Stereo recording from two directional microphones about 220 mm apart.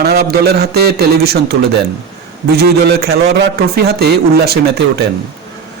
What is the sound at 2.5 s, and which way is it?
Speech, 45° right (ahead or behind).